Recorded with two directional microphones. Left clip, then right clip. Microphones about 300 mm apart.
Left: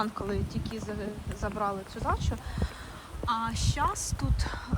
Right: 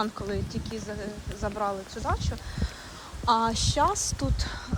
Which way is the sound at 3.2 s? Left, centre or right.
Centre.